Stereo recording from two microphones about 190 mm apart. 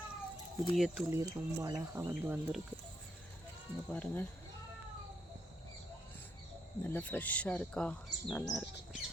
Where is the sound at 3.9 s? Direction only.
10° left (ahead or behind).